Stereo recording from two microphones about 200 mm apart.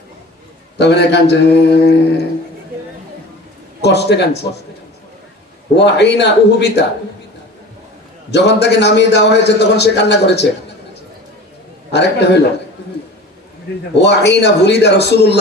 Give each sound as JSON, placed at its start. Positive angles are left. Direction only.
{"t": 0.8, "sound": "a man's voice", "side_deg": 55}
{"t": 3.8, "sound": "speech", "side_deg": 55}
{"t": 5.7, "sound": "a man's voice", "side_deg": 60}
{"t": 8.3, "sound": "a man's voice", "side_deg": 60}
{"t": 11.9, "sound": "a man's voice", "side_deg": 60}
{"t": 13.9, "sound": "a man's voice", "side_deg": 60}